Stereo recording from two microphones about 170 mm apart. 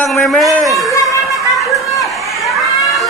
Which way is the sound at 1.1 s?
20° left (ahead or behind).